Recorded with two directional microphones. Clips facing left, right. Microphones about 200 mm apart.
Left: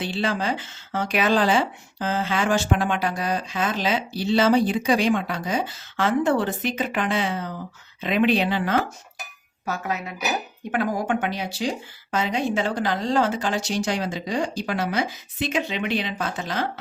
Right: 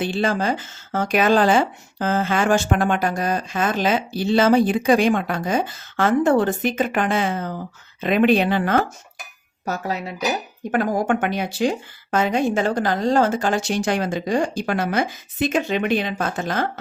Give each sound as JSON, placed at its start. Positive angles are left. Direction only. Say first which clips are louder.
{"t": 0.0, "sound": "speech", "louder": "right 4 dB", "side_deg": -45}
{"t": 9.6, "sound": "speech", "louder": "right 3 dB", "side_deg": -35}
{"t": 10.7, "sound": "speech", "louder": "right 4 dB", "side_deg": -45}